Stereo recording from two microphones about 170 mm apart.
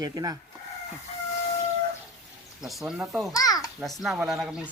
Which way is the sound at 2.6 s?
Centre (ahead or behind).